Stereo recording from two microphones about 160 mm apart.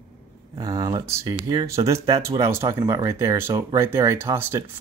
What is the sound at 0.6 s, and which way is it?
Speech, 20° right (ahead or behind).